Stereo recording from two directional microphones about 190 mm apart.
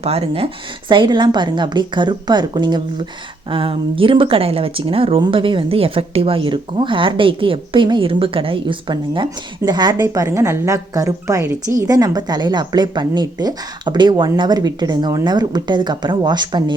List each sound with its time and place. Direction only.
0.0 s speech: 30° right (ahead or behind)